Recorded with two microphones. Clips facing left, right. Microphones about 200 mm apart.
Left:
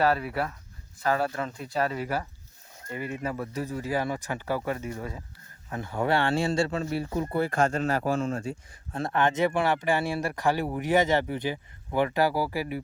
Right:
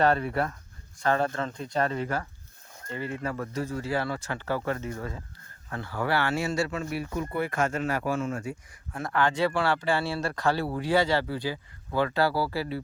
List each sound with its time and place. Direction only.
0.0 s speech: 5° left (ahead or behind)